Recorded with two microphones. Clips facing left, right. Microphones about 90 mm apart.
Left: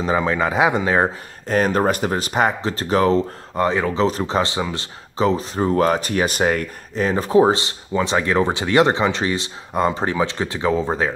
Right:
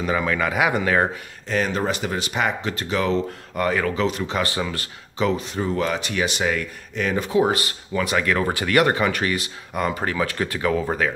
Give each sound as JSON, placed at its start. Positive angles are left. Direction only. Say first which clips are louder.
{"t": 0.0, "sound": "speech", "louder": "left 3 dB", "side_deg": 25}
{"t": 1.5, "sound": "speech", "louder": "left 5 dB", "side_deg": 45}
{"t": 3.5, "sound": "speech", "louder": "left 3 dB", "side_deg": 25}
{"t": 4.4, "sound": "speech", "louder": "left 3 dB", "side_deg": 20}
{"t": 5.1, "sound": "speech", "louder": "left 3 dB", "side_deg": 35}
{"t": 7.5, "sound": "speech", "louder": "left 3 dB", "side_deg": 25}